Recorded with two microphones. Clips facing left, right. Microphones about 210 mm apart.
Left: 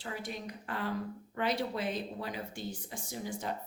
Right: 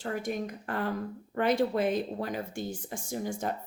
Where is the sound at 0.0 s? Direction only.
50° right (ahead or behind).